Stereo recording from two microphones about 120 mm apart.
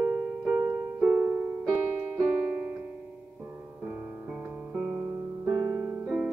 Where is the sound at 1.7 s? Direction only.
20° right (ahead or behind).